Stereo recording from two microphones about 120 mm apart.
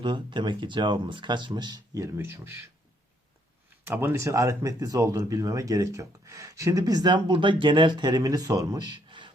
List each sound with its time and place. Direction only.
0.0 s speech: 40° right (ahead or behind)
2.1 s speech: 15° right (ahead or behind)
3.8 s speech: 20° right (ahead or behind); by 9.3 s 40° right (ahead or behind)